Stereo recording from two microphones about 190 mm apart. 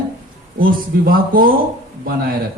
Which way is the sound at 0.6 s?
50° right (ahead or behind).